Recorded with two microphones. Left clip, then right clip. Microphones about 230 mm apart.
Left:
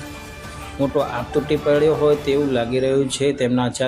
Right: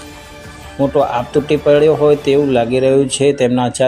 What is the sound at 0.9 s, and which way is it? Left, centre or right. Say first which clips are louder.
Speech: right 8 dB; centre.